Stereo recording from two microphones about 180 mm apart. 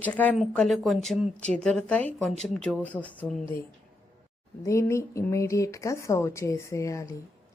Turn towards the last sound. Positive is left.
turn(degrees=15)  # may be behind; listen again after turning